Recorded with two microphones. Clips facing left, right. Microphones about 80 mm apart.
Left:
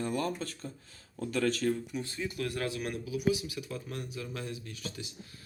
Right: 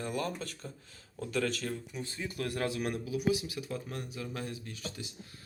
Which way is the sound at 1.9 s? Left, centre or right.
Right.